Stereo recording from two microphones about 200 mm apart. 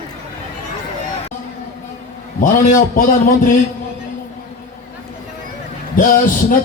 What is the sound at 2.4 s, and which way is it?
Speech, 40° left (ahead or behind).